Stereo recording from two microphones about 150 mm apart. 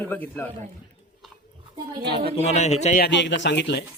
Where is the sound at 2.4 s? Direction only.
50° left (ahead or behind).